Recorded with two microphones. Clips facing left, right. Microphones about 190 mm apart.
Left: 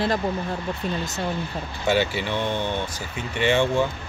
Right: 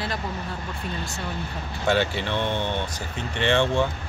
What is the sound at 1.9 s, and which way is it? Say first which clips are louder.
Speech: left 1 dB; 5° left (ahead or behind).